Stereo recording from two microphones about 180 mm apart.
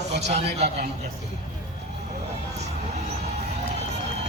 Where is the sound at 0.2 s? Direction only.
40° right (ahead or behind).